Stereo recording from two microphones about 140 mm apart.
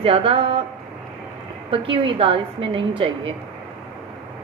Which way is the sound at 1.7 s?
40° right (ahead or behind).